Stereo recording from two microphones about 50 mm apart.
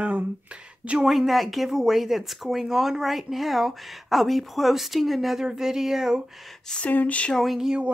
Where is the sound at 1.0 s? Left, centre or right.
Centre.